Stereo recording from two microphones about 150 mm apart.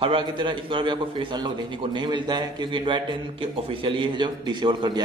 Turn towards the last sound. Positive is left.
turn(degrees=-30)  # may be behind; listen again after turning